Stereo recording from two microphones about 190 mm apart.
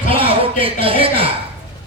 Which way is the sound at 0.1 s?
30° right (ahead or behind).